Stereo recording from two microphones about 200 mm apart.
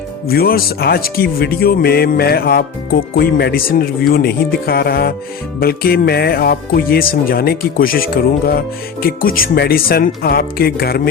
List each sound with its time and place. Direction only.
0.3 s speech: 50° left (ahead or behind)